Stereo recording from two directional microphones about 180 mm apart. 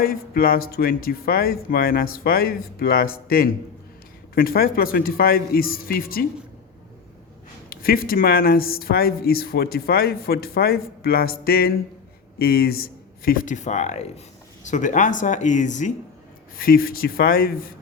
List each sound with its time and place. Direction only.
0.0 s speech: 55° left (ahead or behind)
7.7 s speech: 55° left (ahead or behind)
16.6 s speech: 55° left (ahead or behind)